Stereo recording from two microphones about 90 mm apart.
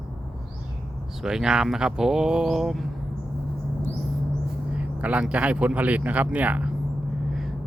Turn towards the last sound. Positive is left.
turn(degrees=-15)  # may be behind; listen again after turning